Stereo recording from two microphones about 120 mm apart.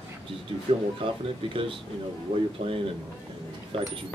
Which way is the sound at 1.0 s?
45° right (ahead or behind).